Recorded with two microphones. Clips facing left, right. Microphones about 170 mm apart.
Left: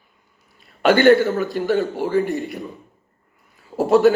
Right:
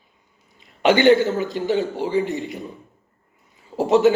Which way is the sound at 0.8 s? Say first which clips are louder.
Left 1 dB; 15° right (ahead or behind).